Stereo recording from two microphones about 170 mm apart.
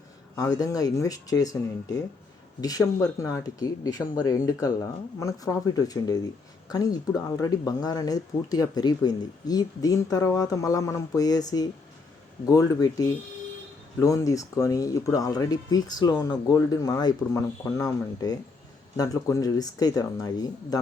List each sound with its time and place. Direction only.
0.3 s speech: 20° left (ahead or behind)